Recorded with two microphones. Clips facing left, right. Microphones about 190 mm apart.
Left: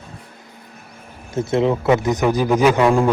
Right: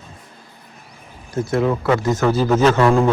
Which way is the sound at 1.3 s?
25° left (ahead or behind).